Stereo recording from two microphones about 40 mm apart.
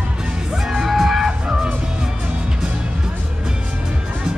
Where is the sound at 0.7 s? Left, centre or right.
Centre.